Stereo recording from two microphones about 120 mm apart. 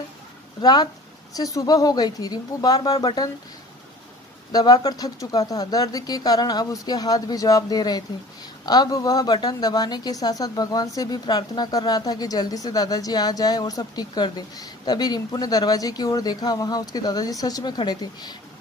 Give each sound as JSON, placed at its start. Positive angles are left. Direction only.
{"t": 0.6, "sound": "speech", "side_deg": 35}
{"t": 4.5, "sound": "speech", "side_deg": 35}